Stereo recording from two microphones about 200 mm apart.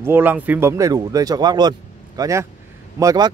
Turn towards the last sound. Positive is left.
turn(degrees=-15)  # may be behind; listen again after turning